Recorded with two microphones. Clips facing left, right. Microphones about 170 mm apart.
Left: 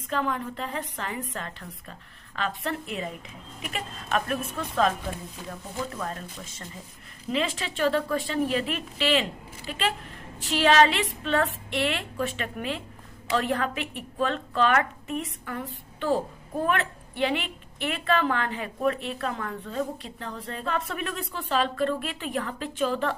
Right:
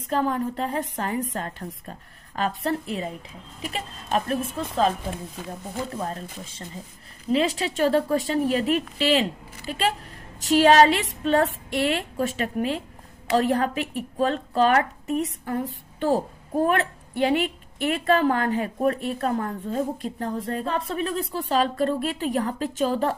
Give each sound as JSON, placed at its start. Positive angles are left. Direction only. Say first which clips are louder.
{"t": 0.1, "sound": "a woman's voice", "louder": "right 5 dB", "side_deg": -40}
{"t": 5.9, "sound": "a woman's voice", "louder": "right 3 dB", "side_deg": -30}
{"t": 20.7, "sound": "a woman's voice", "louder": "even", "side_deg": -30}